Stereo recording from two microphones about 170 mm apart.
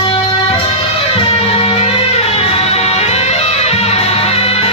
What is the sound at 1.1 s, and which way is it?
Music, 35° left (ahead or behind).